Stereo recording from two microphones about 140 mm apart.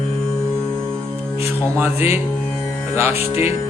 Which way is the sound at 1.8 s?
15° right (ahead or behind).